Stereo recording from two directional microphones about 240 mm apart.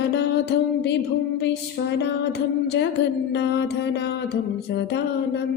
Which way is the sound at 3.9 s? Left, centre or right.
Left.